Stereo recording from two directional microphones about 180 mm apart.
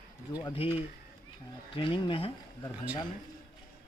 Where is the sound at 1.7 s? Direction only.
30° left (ahead or behind).